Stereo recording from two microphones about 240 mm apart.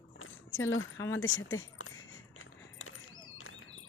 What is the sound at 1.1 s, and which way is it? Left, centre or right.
Keys jangling, left.